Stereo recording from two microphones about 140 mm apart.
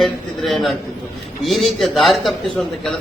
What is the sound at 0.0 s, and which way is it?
A man's voice, centre (ahead or behind).